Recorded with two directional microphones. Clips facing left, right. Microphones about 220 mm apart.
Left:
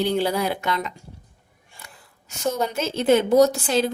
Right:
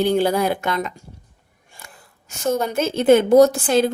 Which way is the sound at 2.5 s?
50° right (ahead or behind).